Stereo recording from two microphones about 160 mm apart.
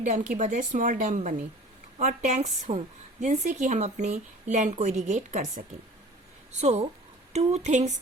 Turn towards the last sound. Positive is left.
turn(degrees=-45)  # may be behind; listen again after turning